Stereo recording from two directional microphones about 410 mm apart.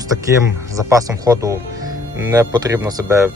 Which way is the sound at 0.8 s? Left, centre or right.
Centre.